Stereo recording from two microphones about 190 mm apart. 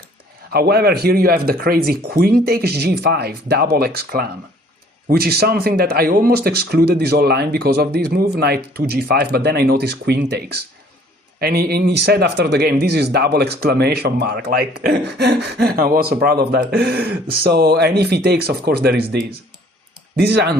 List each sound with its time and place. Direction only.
0.5 s speech: 55° right (ahead or behind)